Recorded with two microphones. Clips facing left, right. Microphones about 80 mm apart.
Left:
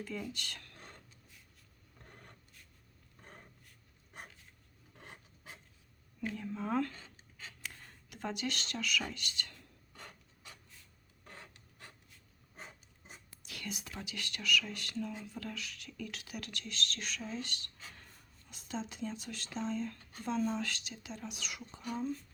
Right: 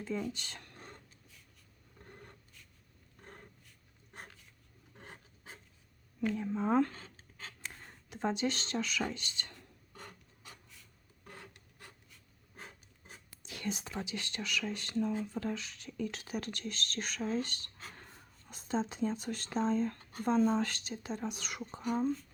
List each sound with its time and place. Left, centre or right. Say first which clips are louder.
0.0 s speech: right 4 dB; right
4.9 s filing: right 1 dB; right
6.3 s speech: right 5 dB; right
13.4 s speech: right 6 dB; right